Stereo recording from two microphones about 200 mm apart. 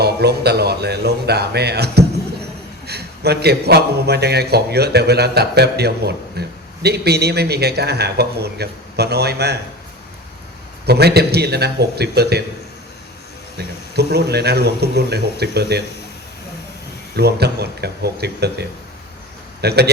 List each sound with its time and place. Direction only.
0.0 s a man's voice: 55° right (ahead or behind)
10.8 s a man's voice: 55° right (ahead or behind)
13.9 s a man's voice: 55° right (ahead or behind)
17.2 s a man's voice: 55° right (ahead or behind)
19.6 s a man's voice: 55° right (ahead or behind)